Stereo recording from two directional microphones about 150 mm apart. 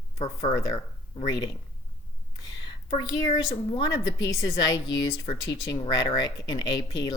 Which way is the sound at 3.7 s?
25° left (ahead or behind).